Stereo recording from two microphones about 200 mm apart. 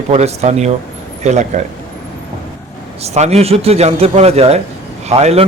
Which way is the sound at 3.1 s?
30° right (ahead or behind).